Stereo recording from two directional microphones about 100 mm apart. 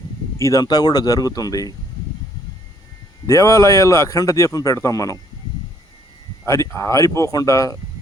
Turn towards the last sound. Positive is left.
turn(degrees=30)  # may be behind; listen again after turning